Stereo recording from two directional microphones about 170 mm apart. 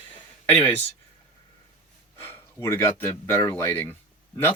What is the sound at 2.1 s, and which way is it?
Speech, 15° left (ahead or behind).